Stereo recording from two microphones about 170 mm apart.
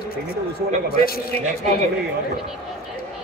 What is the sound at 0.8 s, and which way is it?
Speech, 60° left (ahead or behind).